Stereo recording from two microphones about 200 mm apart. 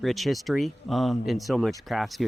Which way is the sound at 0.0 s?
Centre (ahead or behind).